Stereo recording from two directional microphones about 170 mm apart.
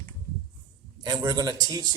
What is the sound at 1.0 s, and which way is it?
Speech, 25° right (ahead or behind).